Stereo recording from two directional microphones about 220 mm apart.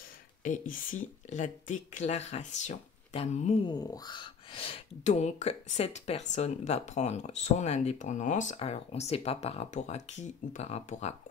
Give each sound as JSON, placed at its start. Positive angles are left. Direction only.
{"t": 0.4, "sound": "speech", "side_deg": 40}
{"t": 3.7, "sound": "speech", "side_deg": 15}